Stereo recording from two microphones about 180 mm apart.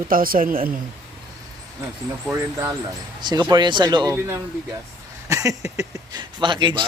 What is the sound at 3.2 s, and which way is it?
Speech, 25° right (ahead or behind).